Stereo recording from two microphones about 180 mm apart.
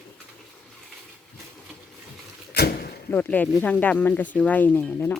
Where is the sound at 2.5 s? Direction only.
60° left (ahead or behind).